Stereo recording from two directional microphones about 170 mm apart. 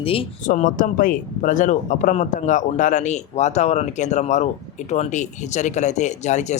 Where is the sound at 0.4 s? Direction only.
50° left (ahead or behind).